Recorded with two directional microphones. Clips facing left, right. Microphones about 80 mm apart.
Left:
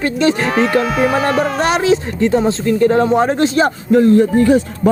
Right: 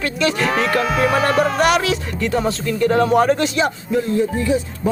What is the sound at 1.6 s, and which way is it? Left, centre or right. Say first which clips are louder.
Speech: left 3 dB; left.